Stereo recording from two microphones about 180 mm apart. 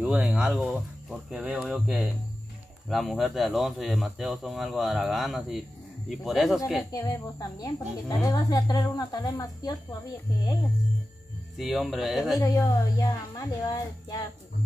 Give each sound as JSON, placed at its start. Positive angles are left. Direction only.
{"t": 0.0, "sound": "speech", "side_deg": -5}
{"t": 6.8, "sound": "a woman's voice", "side_deg": 20}
{"t": 11.5, "sound": "speech", "side_deg": 0}
{"t": 12.4, "sound": "a woman's voice", "side_deg": 20}